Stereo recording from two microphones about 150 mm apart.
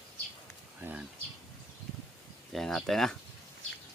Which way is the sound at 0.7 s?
10° right (ahead or behind).